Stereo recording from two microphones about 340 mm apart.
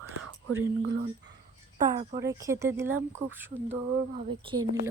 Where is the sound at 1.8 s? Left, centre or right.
Right.